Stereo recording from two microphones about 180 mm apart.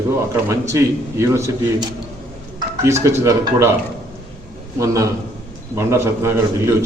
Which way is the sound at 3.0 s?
15° right (ahead or behind).